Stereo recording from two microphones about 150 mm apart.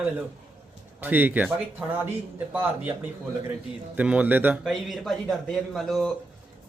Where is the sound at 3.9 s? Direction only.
10° right (ahead or behind).